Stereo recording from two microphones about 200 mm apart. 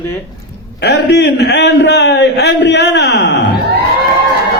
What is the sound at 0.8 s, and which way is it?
A man's voice, 55° left (ahead or behind).